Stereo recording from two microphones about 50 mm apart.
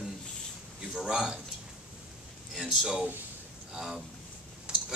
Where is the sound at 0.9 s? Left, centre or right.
Centre.